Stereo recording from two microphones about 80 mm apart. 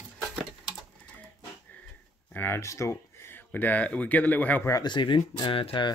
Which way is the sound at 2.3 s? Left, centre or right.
Left.